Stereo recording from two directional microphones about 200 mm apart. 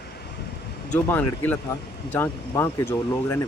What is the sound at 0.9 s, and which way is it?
Speech, 10° left (ahead or behind).